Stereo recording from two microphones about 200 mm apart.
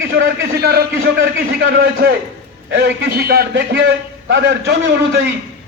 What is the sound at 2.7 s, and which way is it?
A man's voice, 50° right (ahead or behind).